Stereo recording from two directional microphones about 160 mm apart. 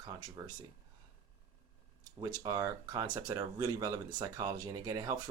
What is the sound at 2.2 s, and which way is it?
Speech, 25° right (ahead or behind).